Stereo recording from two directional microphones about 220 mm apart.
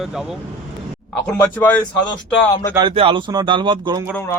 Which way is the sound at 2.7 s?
25° right (ahead or behind).